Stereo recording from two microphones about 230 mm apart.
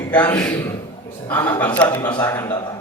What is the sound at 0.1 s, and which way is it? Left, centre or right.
A man's voice, centre.